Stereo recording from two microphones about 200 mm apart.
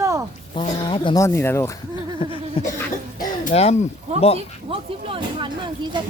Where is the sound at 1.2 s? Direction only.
15° left (ahead or behind).